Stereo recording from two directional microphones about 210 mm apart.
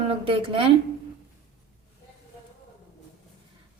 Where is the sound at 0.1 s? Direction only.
25° right (ahead or behind).